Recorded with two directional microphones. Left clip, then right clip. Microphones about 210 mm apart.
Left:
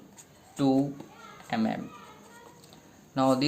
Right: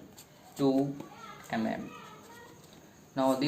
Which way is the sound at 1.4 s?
55° left (ahead or behind).